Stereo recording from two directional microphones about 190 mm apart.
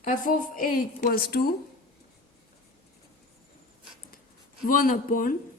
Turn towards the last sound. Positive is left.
turn(degrees=45)  # may be behind; listen again after turning